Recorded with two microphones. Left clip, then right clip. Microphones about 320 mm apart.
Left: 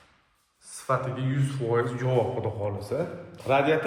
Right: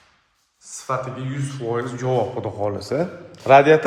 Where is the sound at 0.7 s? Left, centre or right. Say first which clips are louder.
Right 2 dB; centre.